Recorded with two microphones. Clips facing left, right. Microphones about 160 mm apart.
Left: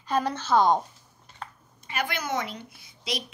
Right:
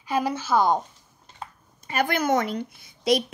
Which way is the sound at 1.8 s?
45° right (ahead or behind).